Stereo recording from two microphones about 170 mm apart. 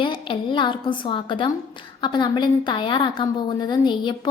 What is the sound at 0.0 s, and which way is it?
A woman's voice, 30° left (ahead or behind).